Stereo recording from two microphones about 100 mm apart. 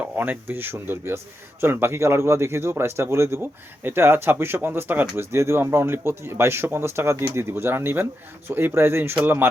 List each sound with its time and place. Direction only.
0.2 s speech: 20° right (ahead or behind)